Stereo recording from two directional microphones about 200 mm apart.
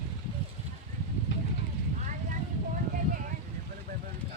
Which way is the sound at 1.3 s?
65° left (ahead or behind).